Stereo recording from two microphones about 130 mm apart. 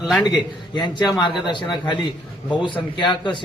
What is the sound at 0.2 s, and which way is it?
A man's voice, 35° left (ahead or behind).